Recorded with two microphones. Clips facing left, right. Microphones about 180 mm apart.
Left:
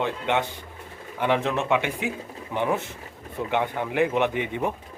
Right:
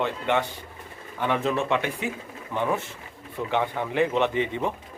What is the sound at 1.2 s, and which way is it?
Speech, 5° left (ahead or behind).